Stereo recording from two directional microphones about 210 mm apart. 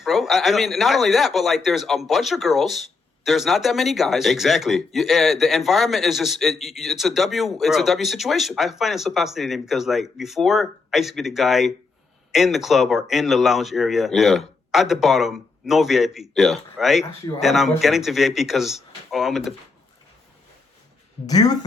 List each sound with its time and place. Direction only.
0.0 s speech: centre (ahead or behind)
21.2 s speech: 20° left (ahead or behind)